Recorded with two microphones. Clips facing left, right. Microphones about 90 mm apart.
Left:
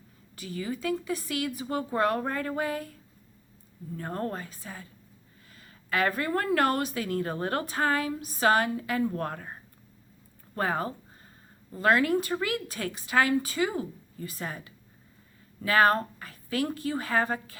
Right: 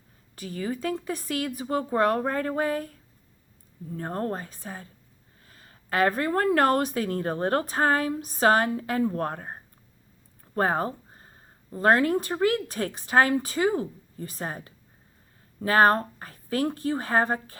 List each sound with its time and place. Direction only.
0.3 s a woman's voice: 40° right (ahead or behind)
3.9 s speech: 35° right (ahead or behind)
10.5 s a sound: 40° right (ahead or behind)
11.7 s speech: 35° right (ahead or behind)